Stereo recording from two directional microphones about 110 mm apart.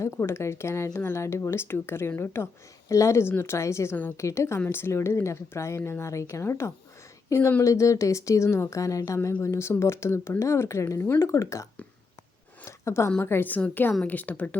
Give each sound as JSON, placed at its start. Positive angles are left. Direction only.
{"t": 0.0, "sound": "speech", "side_deg": 25}
{"t": 12.6, "sound": "a sound", "side_deg": 25}
{"t": 13.1, "sound": "a woman's voice", "side_deg": 20}